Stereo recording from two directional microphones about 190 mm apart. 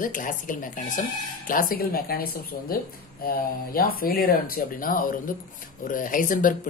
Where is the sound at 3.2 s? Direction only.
50° left (ahead or behind).